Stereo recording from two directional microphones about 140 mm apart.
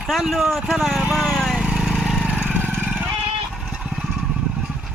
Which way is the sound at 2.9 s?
10° right (ahead or behind).